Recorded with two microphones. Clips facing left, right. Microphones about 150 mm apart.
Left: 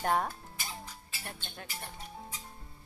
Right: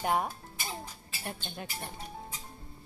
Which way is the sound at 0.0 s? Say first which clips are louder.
Even; 10° right (ahead or behind).